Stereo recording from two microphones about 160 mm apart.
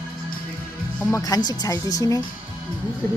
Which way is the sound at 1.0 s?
20° left (ahead or behind).